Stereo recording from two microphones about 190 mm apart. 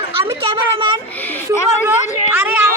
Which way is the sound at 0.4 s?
25° right (ahead or behind).